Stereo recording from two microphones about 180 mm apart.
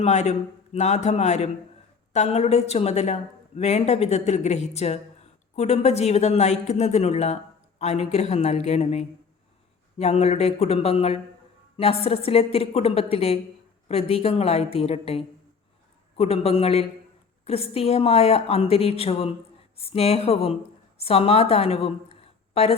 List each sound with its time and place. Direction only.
0.0 s a woman's voice: 40° left (ahead or behind)